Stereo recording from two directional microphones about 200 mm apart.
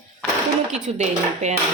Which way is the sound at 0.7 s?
35° right (ahead or behind).